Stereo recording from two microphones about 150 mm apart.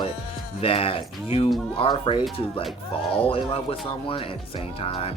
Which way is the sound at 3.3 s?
40° left (ahead or behind).